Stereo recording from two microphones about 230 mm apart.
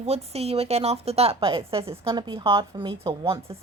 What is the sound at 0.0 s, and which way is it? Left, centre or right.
A woman's voice, right.